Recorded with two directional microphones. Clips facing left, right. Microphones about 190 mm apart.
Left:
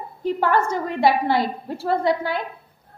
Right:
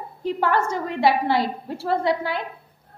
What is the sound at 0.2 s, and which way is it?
A woman's voice, 45° left (ahead or behind).